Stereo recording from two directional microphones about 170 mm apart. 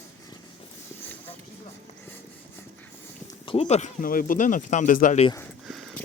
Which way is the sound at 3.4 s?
35° left (ahead or behind).